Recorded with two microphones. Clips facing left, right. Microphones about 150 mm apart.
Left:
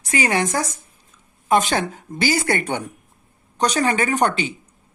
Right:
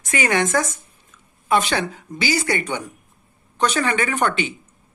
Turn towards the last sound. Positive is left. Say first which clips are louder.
# left 2 dB
turn(degrees=40)  # may be behind; listen again after turning